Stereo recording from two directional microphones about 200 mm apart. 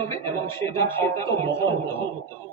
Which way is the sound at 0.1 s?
15° left (ahead or behind).